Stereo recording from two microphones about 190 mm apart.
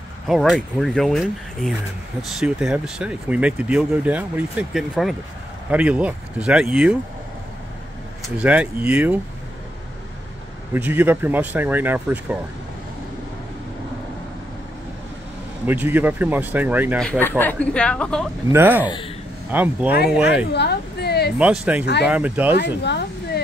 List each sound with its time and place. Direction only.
0.3 s speech: centre (ahead or behind)
8.4 s speech: 5° right (ahead or behind)
10.7 s speech: 10° right (ahead or behind)
15.6 s speech: 10° right (ahead or behind)
17.0 s speech: 5° left (ahead or behind)
18.5 s speech: 10° right (ahead or behind)
20.5 s speech: 60° left (ahead or behind)
21.4 s speech: 5° right (ahead or behind)
22.6 s speech: 60° left (ahead or behind)